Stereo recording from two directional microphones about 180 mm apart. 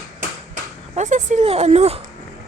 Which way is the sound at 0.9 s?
40° right (ahead or behind).